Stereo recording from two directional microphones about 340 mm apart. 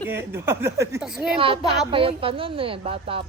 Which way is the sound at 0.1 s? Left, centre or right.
Centre.